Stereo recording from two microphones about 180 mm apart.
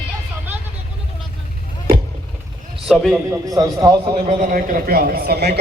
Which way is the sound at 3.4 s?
20° right (ahead or behind).